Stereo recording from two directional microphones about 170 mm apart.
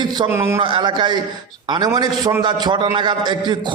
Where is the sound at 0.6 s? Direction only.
30° right (ahead or behind).